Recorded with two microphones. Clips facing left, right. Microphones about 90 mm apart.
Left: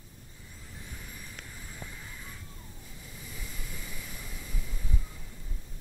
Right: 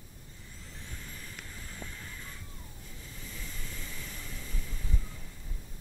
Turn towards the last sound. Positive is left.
turn(degrees=10)  # may be behind; listen again after turning